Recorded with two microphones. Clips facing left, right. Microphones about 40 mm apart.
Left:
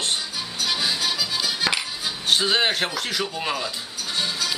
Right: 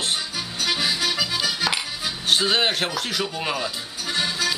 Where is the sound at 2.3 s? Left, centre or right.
Centre.